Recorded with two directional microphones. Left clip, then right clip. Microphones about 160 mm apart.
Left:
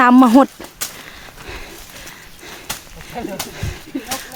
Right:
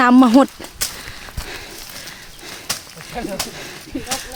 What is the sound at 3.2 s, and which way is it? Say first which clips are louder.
Speech: right 1 dB; 15° right (ahead or behind).